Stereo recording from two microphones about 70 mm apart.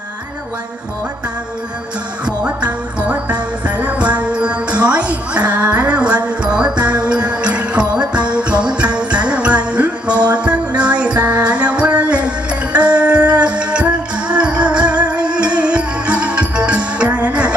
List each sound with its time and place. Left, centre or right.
2.2 s music: centre